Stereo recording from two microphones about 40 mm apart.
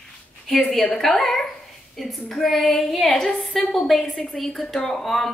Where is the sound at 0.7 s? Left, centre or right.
Centre.